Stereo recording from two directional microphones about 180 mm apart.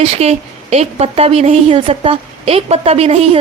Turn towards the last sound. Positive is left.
turn(degrees=-35)  # may be behind; listen again after turning